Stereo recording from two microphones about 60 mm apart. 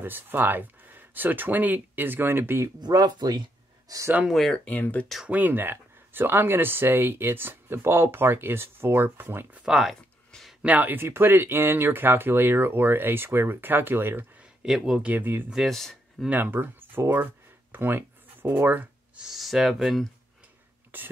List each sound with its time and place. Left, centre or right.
0.0 s speech: right
4.6 s speech: left
5.3 s speech: right
9.7 s speech: centre
10.6 s speech: right
14.6 s speech: centre
15.0 s speech: right
15.5 s speech: centre
16.3 s speech: right
19.1 s speech: centre
20.9 s speech: right